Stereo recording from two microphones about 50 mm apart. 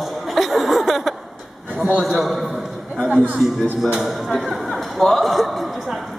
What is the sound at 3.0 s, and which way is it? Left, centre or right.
Speech, right.